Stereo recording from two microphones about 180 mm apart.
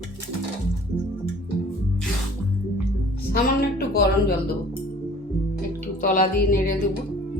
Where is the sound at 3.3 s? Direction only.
55° left (ahead or behind).